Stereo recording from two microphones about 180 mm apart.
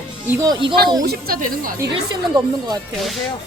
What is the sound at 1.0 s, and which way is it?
Speech, 60° right (ahead or behind).